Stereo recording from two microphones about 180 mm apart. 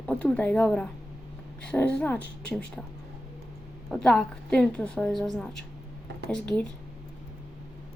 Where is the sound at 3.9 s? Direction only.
5° left (ahead or behind).